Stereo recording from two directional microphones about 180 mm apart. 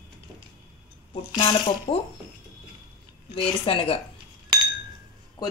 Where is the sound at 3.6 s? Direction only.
30° left (ahead or behind).